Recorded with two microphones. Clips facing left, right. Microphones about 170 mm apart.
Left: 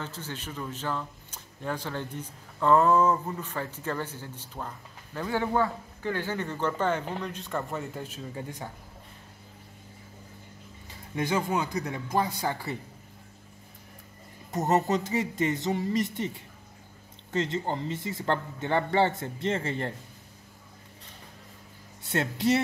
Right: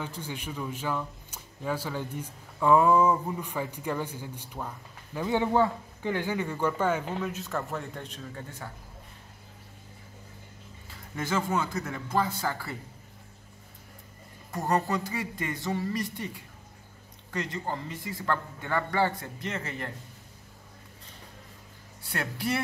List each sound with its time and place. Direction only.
0.0 s speech: 15° right (ahead or behind); by 8.6 s 15° left (ahead or behind)
10.9 s speech: 15° left (ahead or behind)
14.5 s speech: 20° left (ahead or behind)
22.0 s speech: 25° left (ahead or behind)